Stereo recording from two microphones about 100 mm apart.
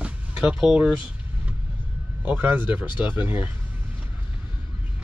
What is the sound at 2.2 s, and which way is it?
Speech, 15° right (ahead or behind).